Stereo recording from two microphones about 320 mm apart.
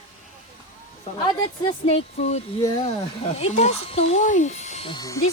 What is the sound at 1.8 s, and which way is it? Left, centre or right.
Speech, centre.